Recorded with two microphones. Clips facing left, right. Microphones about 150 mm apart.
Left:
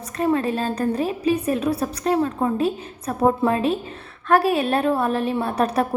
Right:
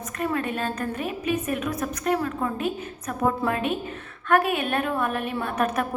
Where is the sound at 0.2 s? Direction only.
30° left (ahead or behind).